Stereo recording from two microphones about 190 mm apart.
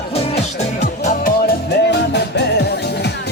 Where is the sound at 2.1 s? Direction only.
60° left (ahead or behind).